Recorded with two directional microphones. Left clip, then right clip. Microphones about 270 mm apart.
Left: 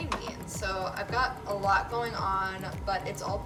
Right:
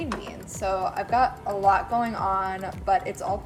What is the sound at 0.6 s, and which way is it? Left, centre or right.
Speech, centre.